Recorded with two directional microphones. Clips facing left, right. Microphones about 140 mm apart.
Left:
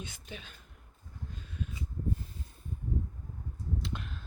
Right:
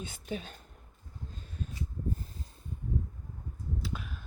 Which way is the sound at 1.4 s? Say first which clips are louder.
Left 1 dB; 40° right (ahead or behind).